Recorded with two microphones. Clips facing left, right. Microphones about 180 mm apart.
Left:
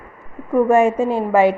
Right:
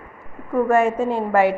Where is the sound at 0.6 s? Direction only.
15° left (ahead or behind).